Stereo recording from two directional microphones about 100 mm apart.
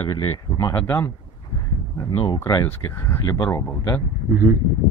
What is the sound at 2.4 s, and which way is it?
Speech, 30° left (ahead or behind).